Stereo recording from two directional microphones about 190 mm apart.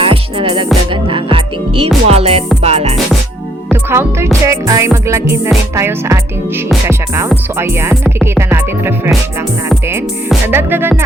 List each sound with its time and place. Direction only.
0.0 s music: 25° right (ahead or behind)
3.7 s speech: 10° right (ahead or behind)
4.4 s music: 15° right (ahead or behind)
7.6 s music: 15° right (ahead or behind)
10.4 s music: 10° right (ahead or behind)